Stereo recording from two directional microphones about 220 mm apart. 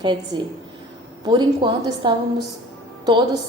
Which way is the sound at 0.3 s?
20° right (ahead or behind).